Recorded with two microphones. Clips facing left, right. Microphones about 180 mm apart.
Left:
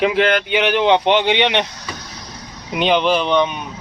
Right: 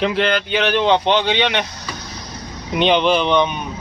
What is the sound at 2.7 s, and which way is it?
Speech, 5° left (ahead or behind).